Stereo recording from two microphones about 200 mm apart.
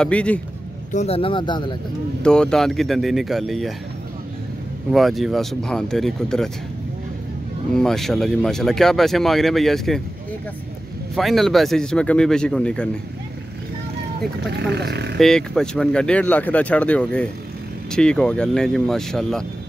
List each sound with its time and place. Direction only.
0.0 s speech: 5° left (ahead or behind)
0.9 s speech: 30° left (ahead or behind)
2.2 s speech: 5° left (ahead or behind)
4.9 s speech: centre (ahead or behind)
7.7 s speech: centre (ahead or behind)
11.1 s speech: centre (ahead or behind)
14.5 s speech: 55° right (ahead or behind)
15.1 s speech: centre (ahead or behind)